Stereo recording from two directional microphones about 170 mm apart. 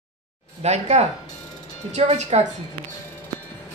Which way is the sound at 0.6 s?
40° right (ahead or behind).